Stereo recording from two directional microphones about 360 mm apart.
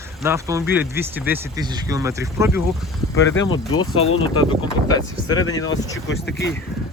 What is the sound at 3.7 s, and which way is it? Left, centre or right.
Speech, left.